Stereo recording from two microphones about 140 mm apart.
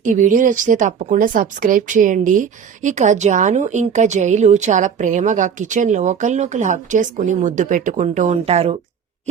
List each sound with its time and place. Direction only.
0.0 s a woman's voice: 65° right (ahead or behind); by 8.7 s 45° right (ahead or behind)